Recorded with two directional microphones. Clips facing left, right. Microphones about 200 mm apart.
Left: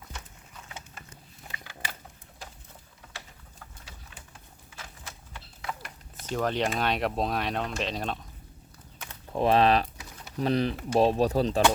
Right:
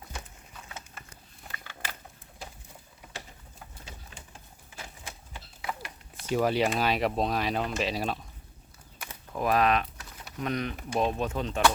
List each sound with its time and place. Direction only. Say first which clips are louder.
1.5 s a sound: left 1 dB; 15° left (ahead or behind)
4.8 s horse: right 2 dB; 15° right (ahead or behind)
6.2 s speech: right 2 dB; 10° right (ahead or behind)
9.3 s speech: left 3 dB; 30° left (ahead or behind)